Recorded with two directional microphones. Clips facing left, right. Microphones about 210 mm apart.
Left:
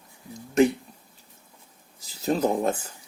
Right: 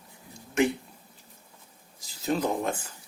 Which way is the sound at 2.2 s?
40° left (ahead or behind).